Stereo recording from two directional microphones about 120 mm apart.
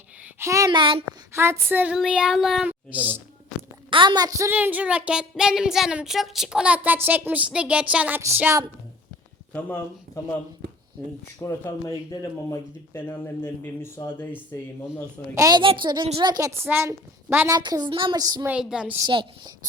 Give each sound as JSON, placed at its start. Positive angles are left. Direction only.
{"t": 0.3, "sound": "a sound", "side_deg": -25}
{"t": 0.7, "sound": "a woman's voice", "side_deg": -45}
{"t": 1.3, "sound": "speech", "side_deg": -20}
{"t": 3.8, "sound": "a woman's voice", "side_deg": -40}
{"t": 4.5, "sound": "speech", "side_deg": -15}
{"t": 9.5, "sound": "speech", "side_deg": 10}
{"t": 11.4, "sound": "speech", "side_deg": 25}
{"t": 13.1, "sound": "speech", "side_deg": 15}
{"t": 15.4, "sound": "a woman's voice", "side_deg": -30}
{"t": 15.6, "sound": "a woman's voice", "side_deg": -45}
{"t": 17.5, "sound": "a woman's voice", "side_deg": -35}
{"t": 18.2, "sound": "a woman's voice", "side_deg": -30}
{"t": 18.4, "sound": "speech", "side_deg": -5}
{"t": 19.0, "sound": "a woman's voice", "side_deg": -40}